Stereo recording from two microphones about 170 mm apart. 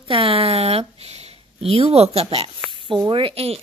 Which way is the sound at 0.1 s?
35° right (ahead or behind).